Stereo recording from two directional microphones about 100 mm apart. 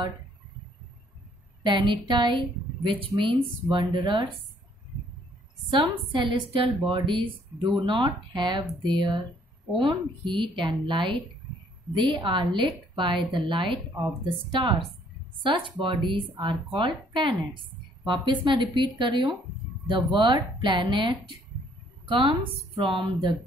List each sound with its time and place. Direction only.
1.6 s a woman's voice: 50° right (ahead or behind)
5.7 s a woman's voice: 55° right (ahead or behind)
20.6 s a woman's voice: 55° right (ahead or behind)